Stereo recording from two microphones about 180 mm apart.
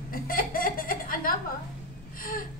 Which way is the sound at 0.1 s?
55° left (ahead or behind).